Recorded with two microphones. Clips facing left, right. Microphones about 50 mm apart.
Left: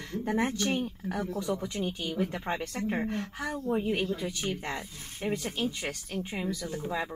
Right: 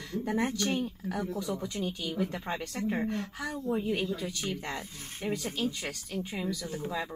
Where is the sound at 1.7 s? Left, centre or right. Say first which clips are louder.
Left 1 dB; left.